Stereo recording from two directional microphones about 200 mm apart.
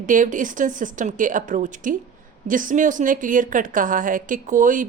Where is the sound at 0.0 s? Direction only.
40° right (ahead or behind).